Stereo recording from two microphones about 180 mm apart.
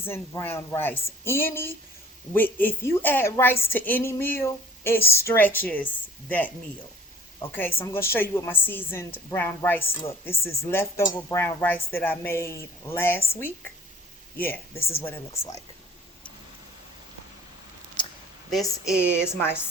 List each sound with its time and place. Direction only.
0.0 s speech: 15° left (ahead or behind)
7.5 s speech: 10° left (ahead or behind)
14.3 s speech: 10° left (ahead or behind)
14.8 s speech: 35° left (ahead or behind)
19.3 s speech: 10° left (ahead or behind)